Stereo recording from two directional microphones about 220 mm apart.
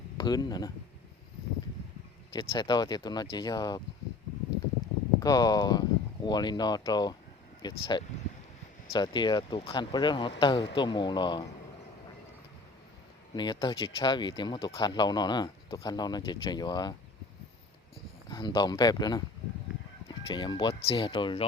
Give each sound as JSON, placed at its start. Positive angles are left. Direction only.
{"t": 0.2, "sound": "speech", "side_deg": 20}
{"t": 2.3, "sound": "speech", "side_deg": 20}
{"t": 5.2, "sound": "speech", "side_deg": 15}
{"t": 13.3, "sound": "speech", "side_deg": 20}
{"t": 18.3, "sound": "speech", "side_deg": 20}